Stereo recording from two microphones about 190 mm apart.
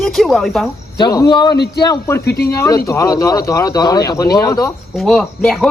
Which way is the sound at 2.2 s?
55° left (ahead or behind).